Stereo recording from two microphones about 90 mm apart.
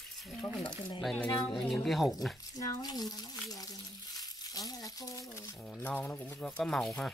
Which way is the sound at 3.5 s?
45° left (ahead or behind).